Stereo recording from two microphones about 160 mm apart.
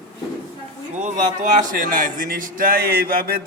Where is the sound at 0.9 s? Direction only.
50° right (ahead or behind).